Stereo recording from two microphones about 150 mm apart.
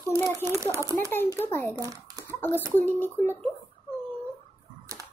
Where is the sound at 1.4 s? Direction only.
15° left (ahead or behind).